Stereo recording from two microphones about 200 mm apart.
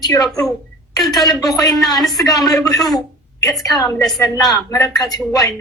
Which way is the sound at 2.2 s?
20° left (ahead or behind).